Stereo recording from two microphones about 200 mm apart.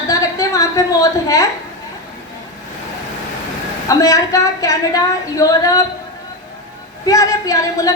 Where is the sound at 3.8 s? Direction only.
15° left (ahead or behind).